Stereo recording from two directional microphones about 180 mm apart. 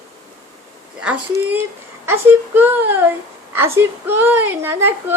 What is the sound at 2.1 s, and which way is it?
A woman's voice, 10° right (ahead or behind).